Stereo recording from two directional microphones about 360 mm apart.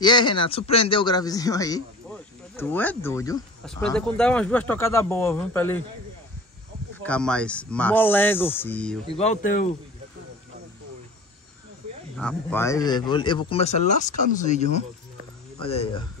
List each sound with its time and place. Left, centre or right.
0.0 s a man's voice: centre
7.0 s speech: centre
9.1 s speech: centre
12.2 s a man's voice: centre